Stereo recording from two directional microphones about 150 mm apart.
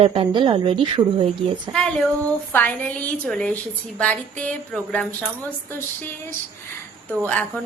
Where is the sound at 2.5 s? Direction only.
10° left (ahead or behind).